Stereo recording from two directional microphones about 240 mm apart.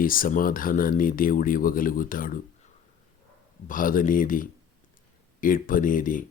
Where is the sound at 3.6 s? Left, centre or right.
Left.